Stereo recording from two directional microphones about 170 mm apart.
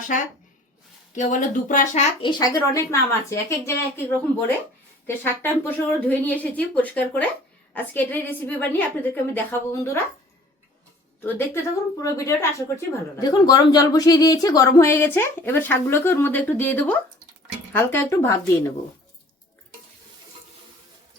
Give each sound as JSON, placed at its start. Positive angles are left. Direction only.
{"t": 1.1, "sound": "speech", "side_deg": 45}
{"t": 2.2, "sound": "speech", "side_deg": 20}
{"t": 11.2, "sound": "speech", "side_deg": 15}